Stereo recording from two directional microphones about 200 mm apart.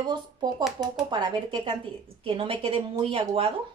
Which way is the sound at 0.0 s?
20° right (ahead or behind).